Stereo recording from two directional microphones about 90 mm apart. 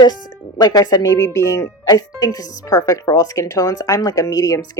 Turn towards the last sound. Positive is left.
turn(degrees=40)  # may be behind; listen again after turning